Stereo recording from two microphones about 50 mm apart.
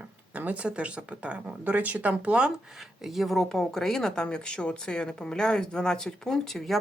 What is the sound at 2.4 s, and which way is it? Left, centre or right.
Speech, centre.